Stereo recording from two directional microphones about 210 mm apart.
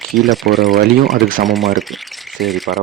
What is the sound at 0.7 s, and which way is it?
Speech, 45° right (ahead or behind).